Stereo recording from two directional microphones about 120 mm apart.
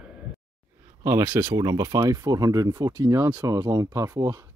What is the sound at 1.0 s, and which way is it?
Speech, 25° right (ahead or behind).